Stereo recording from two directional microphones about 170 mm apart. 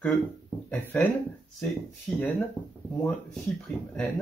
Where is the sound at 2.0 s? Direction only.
10° left (ahead or behind).